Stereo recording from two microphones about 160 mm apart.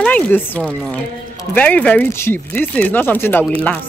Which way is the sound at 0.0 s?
10° left (ahead or behind).